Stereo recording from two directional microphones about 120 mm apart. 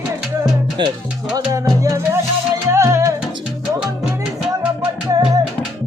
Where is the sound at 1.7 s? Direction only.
25° right (ahead or behind).